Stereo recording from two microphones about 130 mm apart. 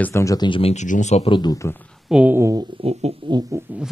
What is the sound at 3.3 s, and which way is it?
Speech, 35° right (ahead or behind).